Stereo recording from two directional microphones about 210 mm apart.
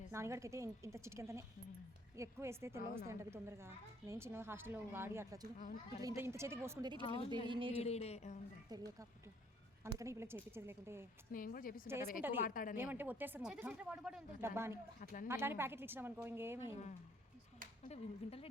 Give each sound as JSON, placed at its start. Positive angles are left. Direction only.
{"t": 0.1, "sound": "a woman's voice", "side_deg": -15}
{"t": 7.0, "sound": "speech", "side_deg": 25}
{"t": 7.4, "sound": "speech", "side_deg": -25}
{"t": 7.8, "sound": "a woman's voice", "side_deg": 30}
{"t": 8.7, "sound": "a woman's voice", "side_deg": -20}
{"t": 11.3, "sound": "a woman's voice", "side_deg": 40}
{"t": 12.7, "sound": "a woman's voice", "side_deg": -10}
{"t": 15.0, "sound": "a woman's voice", "side_deg": 40}
{"t": 15.3, "sound": "a woman's voice", "side_deg": -10}
{"t": 17.8, "sound": "speech", "side_deg": 30}